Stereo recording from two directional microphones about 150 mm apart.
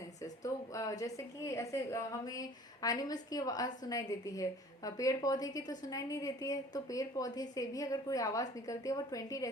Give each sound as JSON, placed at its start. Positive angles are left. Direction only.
{"t": 0.2, "sound": "a woman's voice", "side_deg": 20}